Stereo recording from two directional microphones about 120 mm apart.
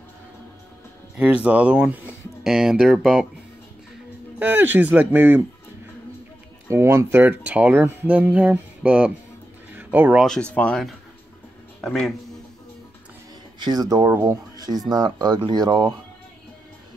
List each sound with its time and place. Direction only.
1.1 s speech: 10° right (ahead or behind)
4.4 s speech: 15° right (ahead or behind)
6.7 s speech: 20° right (ahead or behind)
10.2 s speech: 5° left (ahead or behind)
13.6 s speech: 35° right (ahead or behind)